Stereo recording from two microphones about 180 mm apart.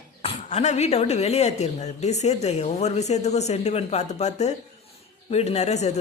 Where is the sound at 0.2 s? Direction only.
40° left (ahead or behind).